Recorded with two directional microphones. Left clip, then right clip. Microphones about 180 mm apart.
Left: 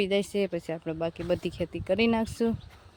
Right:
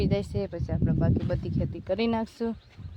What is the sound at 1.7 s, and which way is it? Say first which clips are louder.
Speech: left 2 dB; centre (ahead or behind).